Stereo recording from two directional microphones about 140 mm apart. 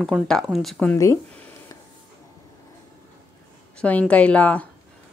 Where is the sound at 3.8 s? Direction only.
10° left (ahead or behind).